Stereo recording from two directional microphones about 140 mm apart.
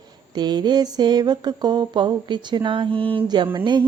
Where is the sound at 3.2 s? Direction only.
35° right (ahead or behind).